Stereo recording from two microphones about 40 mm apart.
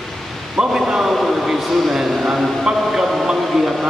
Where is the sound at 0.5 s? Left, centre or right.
Centre.